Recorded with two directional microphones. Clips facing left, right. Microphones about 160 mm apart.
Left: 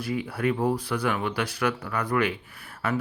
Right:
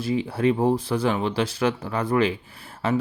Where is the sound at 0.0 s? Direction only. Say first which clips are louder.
Right 5 dB; 25° right (ahead or behind).